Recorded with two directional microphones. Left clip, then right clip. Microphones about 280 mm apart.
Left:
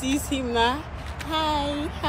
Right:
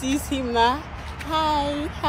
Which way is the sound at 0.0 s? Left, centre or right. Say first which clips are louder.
Right 1 dB; centre.